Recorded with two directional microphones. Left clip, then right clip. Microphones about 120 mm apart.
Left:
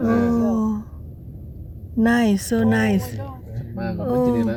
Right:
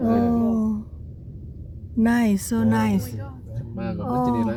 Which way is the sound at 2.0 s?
10° right (ahead or behind).